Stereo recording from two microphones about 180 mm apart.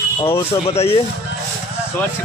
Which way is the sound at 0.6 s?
35° left (ahead or behind).